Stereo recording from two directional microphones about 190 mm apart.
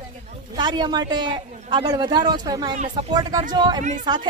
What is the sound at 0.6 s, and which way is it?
A man's voice, 25° right (ahead or behind).